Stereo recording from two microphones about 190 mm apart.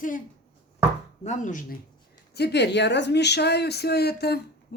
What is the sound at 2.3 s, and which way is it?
Speech, 60° left (ahead or behind).